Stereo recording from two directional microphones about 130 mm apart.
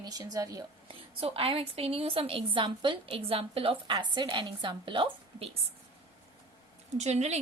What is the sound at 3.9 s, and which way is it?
A woman's voice, 35° right (ahead or behind).